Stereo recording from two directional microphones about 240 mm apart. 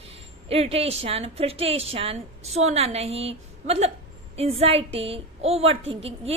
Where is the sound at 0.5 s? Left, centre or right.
Right.